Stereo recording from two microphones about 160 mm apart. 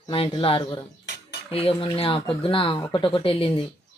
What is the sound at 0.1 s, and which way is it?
Speech, 35° left (ahead or behind).